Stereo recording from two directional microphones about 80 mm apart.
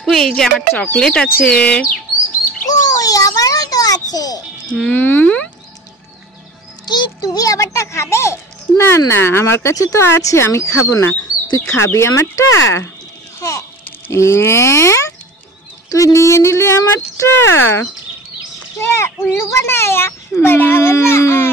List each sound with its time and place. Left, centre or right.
0.0 s speech: centre
3.0 s a child's voice: left
4.9 s speech: left
6.9 s a child's voice: left
7.3 s a child's voice: left
13.4 s a sound: left
14.1 s a child's voice: left